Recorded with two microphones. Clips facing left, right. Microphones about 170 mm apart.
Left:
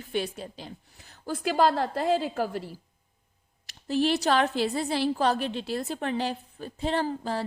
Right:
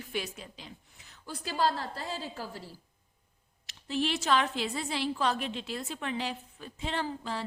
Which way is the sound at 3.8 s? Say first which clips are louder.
Left 5 dB; 40° left (ahead or behind).